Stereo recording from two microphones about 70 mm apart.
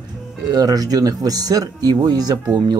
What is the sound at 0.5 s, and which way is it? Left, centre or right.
Speech, right.